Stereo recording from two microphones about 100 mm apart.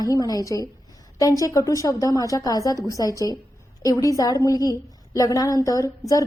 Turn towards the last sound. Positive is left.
turn(degrees=35)  # may be behind; listen again after turning